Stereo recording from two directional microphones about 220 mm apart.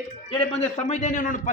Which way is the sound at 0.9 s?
35° left (ahead or behind).